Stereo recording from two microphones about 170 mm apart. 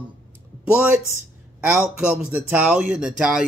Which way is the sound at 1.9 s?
5° right (ahead or behind).